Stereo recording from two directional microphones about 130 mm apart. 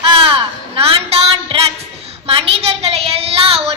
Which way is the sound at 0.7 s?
50° right (ahead or behind).